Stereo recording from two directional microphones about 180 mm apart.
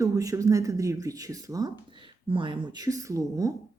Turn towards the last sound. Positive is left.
turn(degrees=-20)  # may be behind; listen again after turning